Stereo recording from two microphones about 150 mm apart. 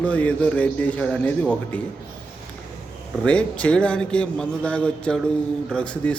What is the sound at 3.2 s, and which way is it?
A man's voice, 10° left (ahead or behind).